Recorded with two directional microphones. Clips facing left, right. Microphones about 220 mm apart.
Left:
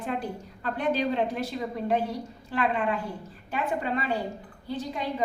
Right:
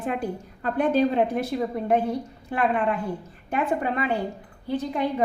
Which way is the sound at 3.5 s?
55° right (ahead or behind).